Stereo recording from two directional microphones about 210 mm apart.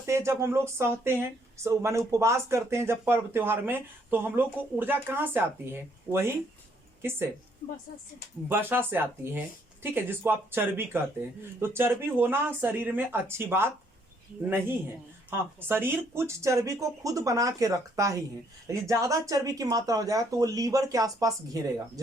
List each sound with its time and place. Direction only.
0.0 s speech: 15° right (ahead or behind)
8.4 s speech: 10° right (ahead or behind)